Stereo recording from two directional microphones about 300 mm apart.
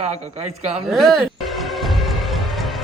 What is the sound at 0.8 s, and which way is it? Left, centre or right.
Music, centre.